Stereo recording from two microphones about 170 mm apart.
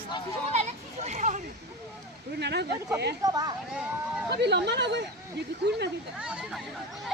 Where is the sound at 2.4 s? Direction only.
80° right.